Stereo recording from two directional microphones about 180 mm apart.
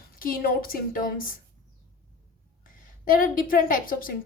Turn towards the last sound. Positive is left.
turn(degrees=50)  # may be behind; listen again after turning